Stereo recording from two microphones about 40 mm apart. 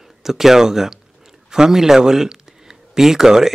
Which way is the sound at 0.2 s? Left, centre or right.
Centre.